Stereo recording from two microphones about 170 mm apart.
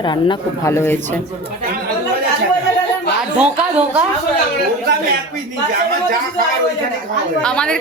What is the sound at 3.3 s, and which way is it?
Speech, 10° right (ahead or behind).